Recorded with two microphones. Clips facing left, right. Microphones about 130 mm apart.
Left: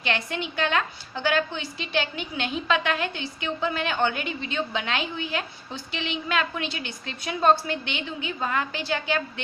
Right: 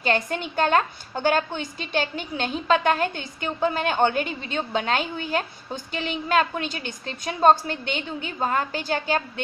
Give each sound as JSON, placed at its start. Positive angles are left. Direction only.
{"t": 0.0, "sound": "a woman's voice", "side_deg": -40}